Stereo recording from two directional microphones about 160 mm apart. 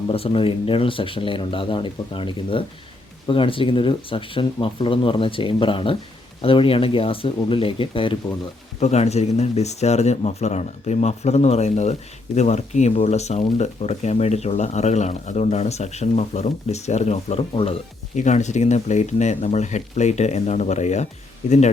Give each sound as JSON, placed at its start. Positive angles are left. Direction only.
{"t": 0.1, "sound": "speech", "side_deg": 35}
{"t": 18.1, "sound": "speech", "side_deg": 45}